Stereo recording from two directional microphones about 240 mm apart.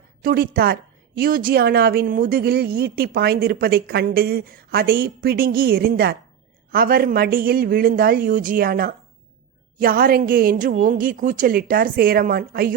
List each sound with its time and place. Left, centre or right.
0.2 s a woman's voice: right